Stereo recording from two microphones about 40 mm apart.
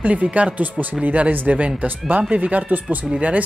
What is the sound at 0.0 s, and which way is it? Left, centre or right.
Speech, right.